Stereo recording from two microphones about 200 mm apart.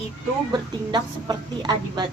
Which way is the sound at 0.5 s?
20° right (ahead or behind).